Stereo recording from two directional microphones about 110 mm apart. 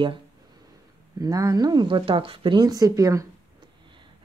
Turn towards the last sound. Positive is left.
turn(degrees=-30)  # may be behind; listen again after turning